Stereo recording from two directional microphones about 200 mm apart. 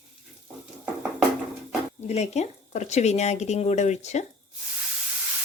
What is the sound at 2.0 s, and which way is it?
Speech, 35° left (ahead or behind).